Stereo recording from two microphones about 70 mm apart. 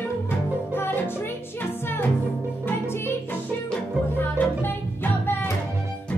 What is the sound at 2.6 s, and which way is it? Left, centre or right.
Music, left.